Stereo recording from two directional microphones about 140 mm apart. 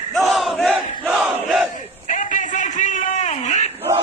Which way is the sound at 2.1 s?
65° left (ahead or behind).